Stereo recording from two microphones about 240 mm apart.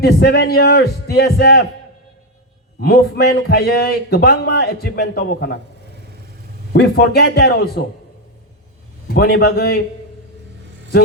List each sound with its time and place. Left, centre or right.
0.0 s a man's voice: left
2.8 s a man's voice: left
6.7 s a man's voice: left
9.1 s a man's voice: left